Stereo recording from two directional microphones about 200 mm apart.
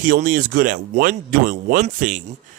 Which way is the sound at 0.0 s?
40° right (ahead or behind).